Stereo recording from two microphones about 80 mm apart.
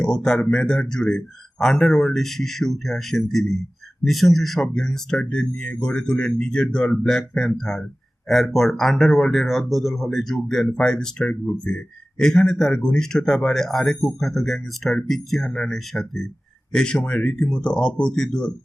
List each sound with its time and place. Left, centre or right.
0.0 s speech: centre